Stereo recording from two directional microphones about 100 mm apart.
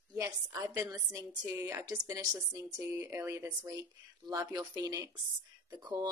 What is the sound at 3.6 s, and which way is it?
A woman's voice, 45° right (ahead or behind).